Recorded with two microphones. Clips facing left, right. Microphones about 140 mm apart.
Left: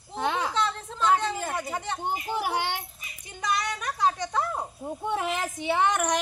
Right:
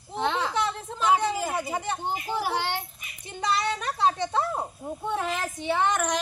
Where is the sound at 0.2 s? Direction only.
10° left (ahead or behind).